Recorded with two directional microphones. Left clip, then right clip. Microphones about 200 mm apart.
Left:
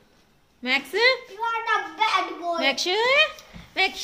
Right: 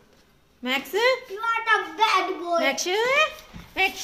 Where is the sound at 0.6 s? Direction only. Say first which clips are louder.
Left 2 dB; 10° left (ahead or behind).